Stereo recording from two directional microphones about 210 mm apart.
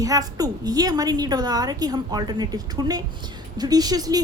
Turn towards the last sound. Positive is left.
turn(degrees=-20)  # may be behind; listen again after turning